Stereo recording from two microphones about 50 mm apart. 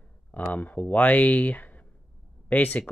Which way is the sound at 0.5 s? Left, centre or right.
Left.